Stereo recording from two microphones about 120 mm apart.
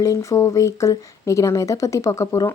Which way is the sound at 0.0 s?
25° left (ahead or behind).